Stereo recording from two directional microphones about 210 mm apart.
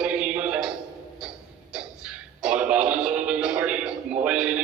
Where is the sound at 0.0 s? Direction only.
5° right (ahead or behind).